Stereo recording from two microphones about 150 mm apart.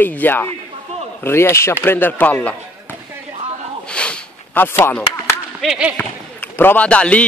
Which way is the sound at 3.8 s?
5° left (ahead or behind).